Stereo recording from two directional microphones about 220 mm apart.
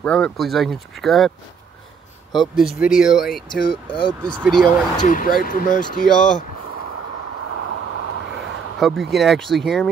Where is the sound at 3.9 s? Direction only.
20° left (ahead or behind).